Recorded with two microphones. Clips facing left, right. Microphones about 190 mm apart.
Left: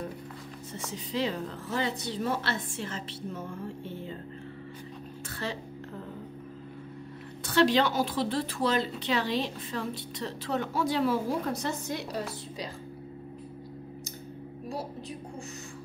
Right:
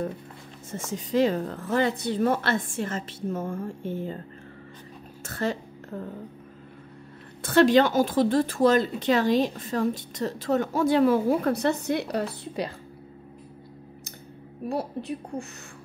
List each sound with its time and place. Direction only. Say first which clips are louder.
0.7 s a woman's voice: right 7 dB; 45° right (ahead or behind)
5.3 s a sound: right 8 dB; 45° right (ahead or behind)
7.4 s a woman's voice: right 6 dB; 50° right (ahead or behind)
14.7 s a woman's voice: right 8 dB; 60° right (ahead or behind)